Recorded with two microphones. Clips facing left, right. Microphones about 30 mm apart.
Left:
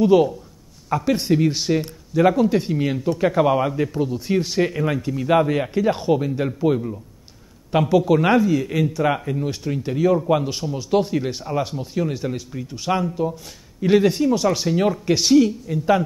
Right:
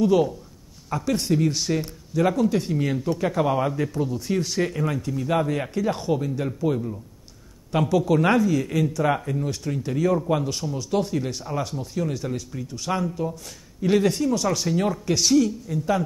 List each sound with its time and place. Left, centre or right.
0.0 s speech: centre